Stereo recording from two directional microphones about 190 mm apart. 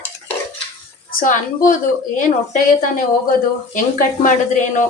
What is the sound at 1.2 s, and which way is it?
Speech, 45° left (ahead or behind).